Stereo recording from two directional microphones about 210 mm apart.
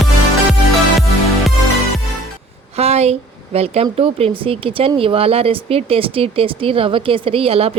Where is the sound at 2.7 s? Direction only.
30° right (ahead or behind).